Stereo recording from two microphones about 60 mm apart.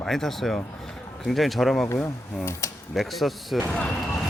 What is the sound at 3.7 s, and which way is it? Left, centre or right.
Speech, centre.